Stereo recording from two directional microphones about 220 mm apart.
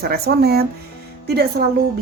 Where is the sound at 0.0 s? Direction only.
45° right (ahead or behind).